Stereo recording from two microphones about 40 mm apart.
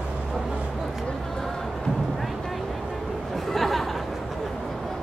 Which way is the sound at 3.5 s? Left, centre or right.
Centre.